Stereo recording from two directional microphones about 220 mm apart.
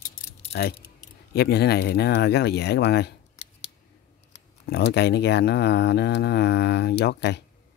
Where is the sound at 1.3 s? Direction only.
45° left (ahead or behind).